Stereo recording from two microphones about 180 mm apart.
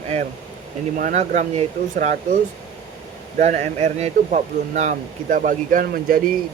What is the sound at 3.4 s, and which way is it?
Speech, 40° right (ahead or behind).